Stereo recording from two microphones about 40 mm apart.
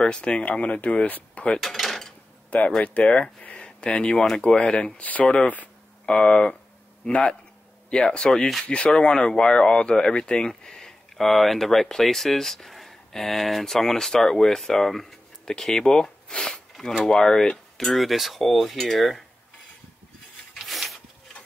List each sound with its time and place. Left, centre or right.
0.0 s speech: left
0.5 s speech: left
1.6 s dishes: centre
2.5 s speech: left
3.0 s a sound: left
3.9 s speech: left
7.9 s speech: left; by 19.2 s centre
20.5 s a sound: centre